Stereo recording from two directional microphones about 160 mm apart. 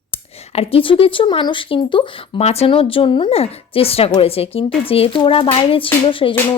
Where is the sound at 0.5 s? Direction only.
35° left (ahead or behind).